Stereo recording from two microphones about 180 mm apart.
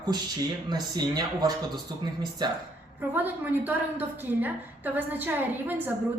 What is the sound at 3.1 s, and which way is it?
A woman's voice, 10° right (ahead or behind).